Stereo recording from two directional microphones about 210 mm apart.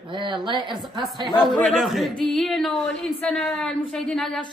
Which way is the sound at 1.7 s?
Centre (ahead or behind).